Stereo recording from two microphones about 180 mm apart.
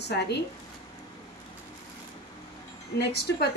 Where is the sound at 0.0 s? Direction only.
70° left (ahead or behind).